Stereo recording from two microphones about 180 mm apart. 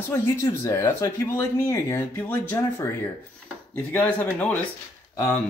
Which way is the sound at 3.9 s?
10° left (ahead or behind).